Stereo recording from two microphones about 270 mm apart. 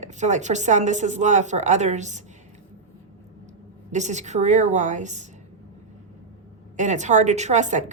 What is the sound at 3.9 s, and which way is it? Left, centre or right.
A woman's voice, right.